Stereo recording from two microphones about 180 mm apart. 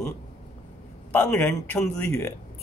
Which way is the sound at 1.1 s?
10° left (ahead or behind).